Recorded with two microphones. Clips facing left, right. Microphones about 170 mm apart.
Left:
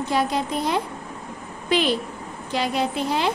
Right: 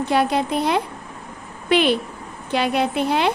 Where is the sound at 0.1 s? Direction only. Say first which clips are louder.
Right 4 dB; 65° right (ahead or behind).